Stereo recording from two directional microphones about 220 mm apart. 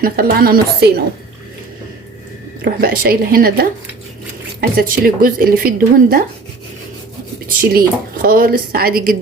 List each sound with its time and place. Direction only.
0.0 s speech: 40° right (ahead or behind)
2.6 s speech: 40° right (ahead or behind)
4.8 s a woman's voice: 40° right (ahead or behind)
7.6 s speech: 40° right (ahead or behind)